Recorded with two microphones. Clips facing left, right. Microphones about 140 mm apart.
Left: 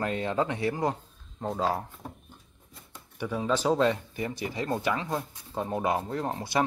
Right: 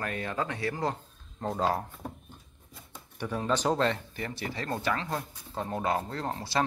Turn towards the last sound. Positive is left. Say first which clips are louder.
# left 2 dB
turn(degrees=20)  # may be behind; listen again after turning